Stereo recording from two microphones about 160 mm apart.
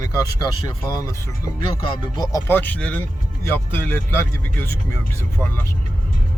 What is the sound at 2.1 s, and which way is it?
Speech, 25° left (ahead or behind).